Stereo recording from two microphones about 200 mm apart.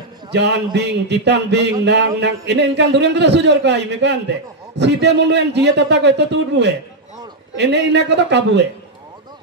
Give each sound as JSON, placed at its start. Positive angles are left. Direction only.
{"t": 0.3, "sound": "a man's voice", "side_deg": -60}